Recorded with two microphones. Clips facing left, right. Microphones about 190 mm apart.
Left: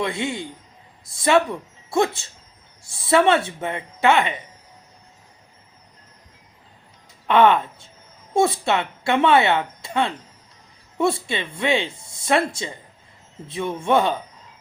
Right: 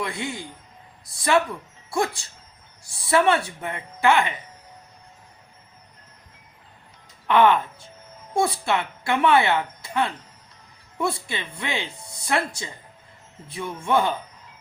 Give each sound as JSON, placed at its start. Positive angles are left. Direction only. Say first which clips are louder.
{"t": 0.0, "sound": "a man's voice", "louder": "left 5 dB", "side_deg": 25}
{"t": 7.3, "sound": "a woman's voice", "louder": "left 2 dB", "side_deg": 25}